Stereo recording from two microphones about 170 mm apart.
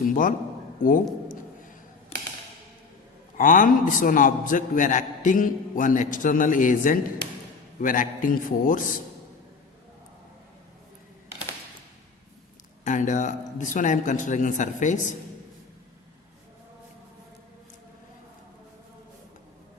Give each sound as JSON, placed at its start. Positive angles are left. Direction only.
{"t": 0.0, "sound": "a man's voice", "side_deg": 50}
{"t": 3.3, "sound": "a man's voice", "side_deg": 50}
{"t": 12.8, "sound": "a man's voice", "side_deg": 45}